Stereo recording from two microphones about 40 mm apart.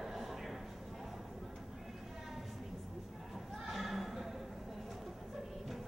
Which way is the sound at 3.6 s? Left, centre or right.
Centre.